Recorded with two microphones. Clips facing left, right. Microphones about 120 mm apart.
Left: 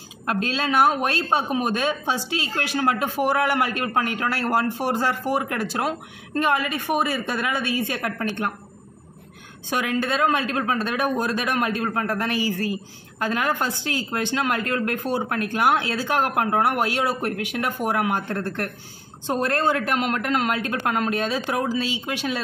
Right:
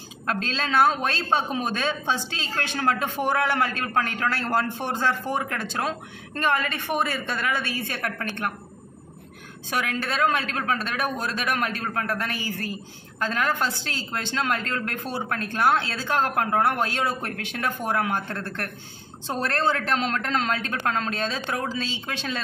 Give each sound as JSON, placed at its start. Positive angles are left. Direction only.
{"t": 0.3, "sound": "a man's voice", "side_deg": 15}
{"t": 9.7, "sound": "a man's voice", "side_deg": 20}